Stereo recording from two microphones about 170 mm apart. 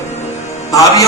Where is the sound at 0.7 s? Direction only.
20° left (ahead or behind).